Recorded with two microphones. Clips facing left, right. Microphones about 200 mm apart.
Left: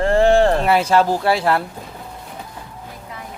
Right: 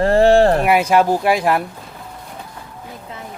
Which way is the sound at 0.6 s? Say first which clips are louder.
Right 1 dB; 15° right (ahead or behind).